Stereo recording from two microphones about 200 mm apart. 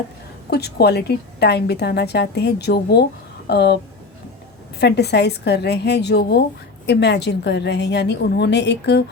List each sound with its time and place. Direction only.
0.5 s a woman's voice: 55° left (ahead or behind)
4.8 s a woman's voice: 55° left (ahead or behind)